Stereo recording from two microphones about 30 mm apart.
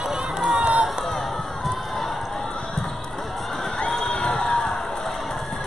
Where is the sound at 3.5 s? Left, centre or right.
Centre.